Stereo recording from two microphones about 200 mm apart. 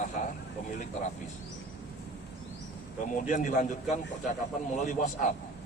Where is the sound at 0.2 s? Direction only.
40° left (ahead or behind).